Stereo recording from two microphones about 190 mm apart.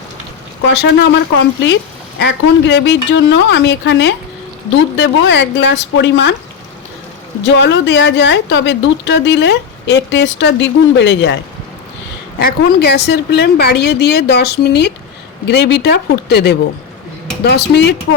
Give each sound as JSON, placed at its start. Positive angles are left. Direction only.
{"t": 0.7, "sound": "a woman's voice", "side_deg": 65}
{"t": 7.4, "sound": "a woman's voice", "side_deg": 70}
{"t": 12.4, "sound": "a woman's voice", "side_deg": 55}